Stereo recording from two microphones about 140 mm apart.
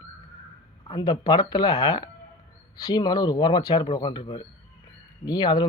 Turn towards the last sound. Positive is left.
turn(degrees=30)  # may be behind; listen again after turning